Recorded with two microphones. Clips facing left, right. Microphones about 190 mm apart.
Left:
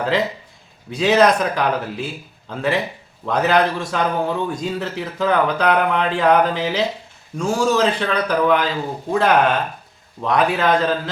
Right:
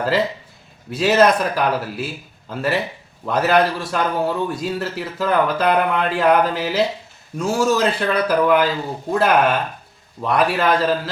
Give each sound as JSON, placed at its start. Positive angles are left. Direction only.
{"t": 0.9, "sound": "a man's voice", "side_deg": -5}